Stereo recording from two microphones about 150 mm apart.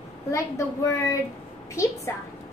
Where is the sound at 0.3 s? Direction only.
20° left (ahead or behind).